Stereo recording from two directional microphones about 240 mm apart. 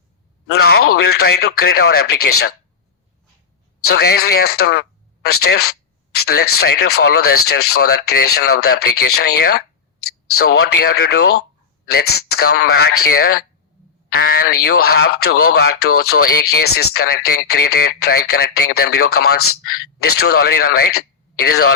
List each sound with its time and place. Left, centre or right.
0.4 s speech: left
3.8 s speech: left